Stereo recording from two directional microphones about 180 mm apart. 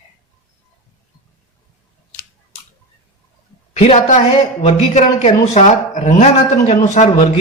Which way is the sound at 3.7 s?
35° left (ahead or behind).